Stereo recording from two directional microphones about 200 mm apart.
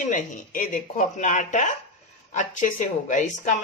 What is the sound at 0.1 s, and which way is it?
Speech, 45° left (ahead or behind).